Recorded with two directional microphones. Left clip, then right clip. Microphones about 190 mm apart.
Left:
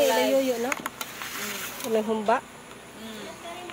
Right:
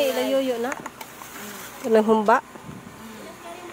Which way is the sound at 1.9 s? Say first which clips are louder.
Right 7 dB; 40° right (ahead or behind).